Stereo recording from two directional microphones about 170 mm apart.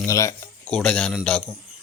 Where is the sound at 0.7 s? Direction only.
5° left (ahead or behind).